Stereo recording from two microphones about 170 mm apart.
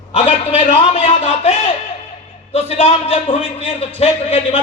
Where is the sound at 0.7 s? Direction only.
40° left (ahead or behind).